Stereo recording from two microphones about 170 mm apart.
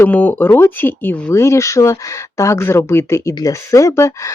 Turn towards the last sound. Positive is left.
turn(degrees=15)  # may be behind; listen again after turning